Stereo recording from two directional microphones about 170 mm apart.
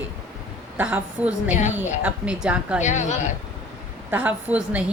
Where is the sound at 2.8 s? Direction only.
45° left (ahead or behind).